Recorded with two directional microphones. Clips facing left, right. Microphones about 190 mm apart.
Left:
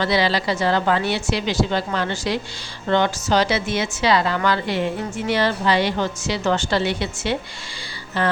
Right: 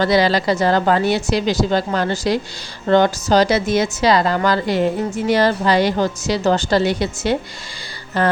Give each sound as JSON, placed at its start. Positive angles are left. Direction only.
{"t": 0.0, "sound": "a woman's voice", "side_deg": -45}